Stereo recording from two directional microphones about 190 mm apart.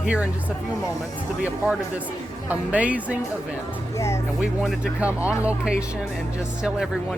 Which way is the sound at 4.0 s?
15° left (ahead or behind).